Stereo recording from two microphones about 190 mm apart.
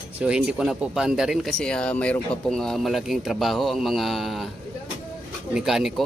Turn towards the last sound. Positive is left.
turn(degrees=0)  # may be behind; listen again after turning